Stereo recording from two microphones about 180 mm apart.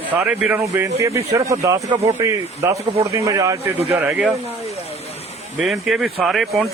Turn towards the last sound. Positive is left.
turn(degrees=0)  # may be behind; listen again after turning